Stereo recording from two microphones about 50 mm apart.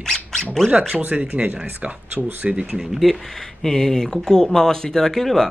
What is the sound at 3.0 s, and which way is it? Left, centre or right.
Speech, centre.